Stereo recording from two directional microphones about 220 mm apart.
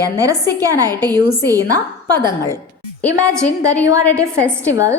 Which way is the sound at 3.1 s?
15° right (ahead or behind).